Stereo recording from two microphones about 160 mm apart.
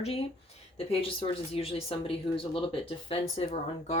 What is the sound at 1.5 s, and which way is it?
Speech, 40° left (ahead or behind).